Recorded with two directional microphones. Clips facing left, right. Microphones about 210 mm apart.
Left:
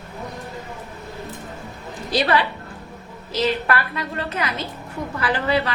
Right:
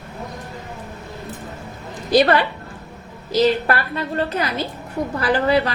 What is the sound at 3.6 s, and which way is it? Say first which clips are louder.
A woman's voice: right 2 dB; 35° right (ahead or behind).